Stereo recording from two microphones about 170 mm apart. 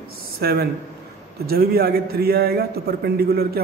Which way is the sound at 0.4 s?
65° right (ahead or behind).